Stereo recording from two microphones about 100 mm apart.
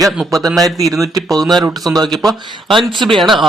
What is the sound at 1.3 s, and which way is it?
Speech, centre (ahead or behind).